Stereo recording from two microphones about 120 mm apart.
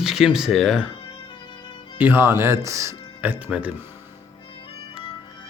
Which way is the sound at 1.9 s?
15° right (ahead or behind).